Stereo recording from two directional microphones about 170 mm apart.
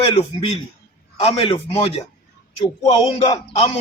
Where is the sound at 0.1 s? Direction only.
35° left (ahead or behind).